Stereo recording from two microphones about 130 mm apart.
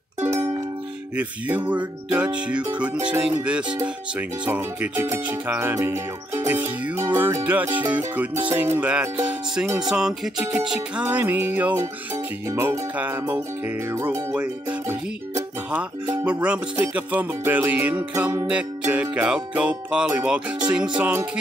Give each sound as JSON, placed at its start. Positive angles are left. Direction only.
{"t": 0.2, "sound": "music", "side_deg": -20}
{"t": 2.0, "sound": "music", "side_deg": -10}
{"t": 9.8, "sound": "speech", "side_deg": -5}
{"t": 10.7, "sound": "music", "side_deg": -10}
{"t": 16.3, "sound": "music", "side_deg": -10}
{"t": 21.0, "sound": "music", "side_deg": -15}